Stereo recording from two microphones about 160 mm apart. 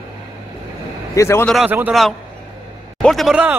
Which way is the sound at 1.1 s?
15° left (ahead or behind).